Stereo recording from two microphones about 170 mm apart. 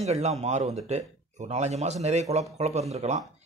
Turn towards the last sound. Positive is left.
turn(degrees=-45)  # may be behind; listen again after turning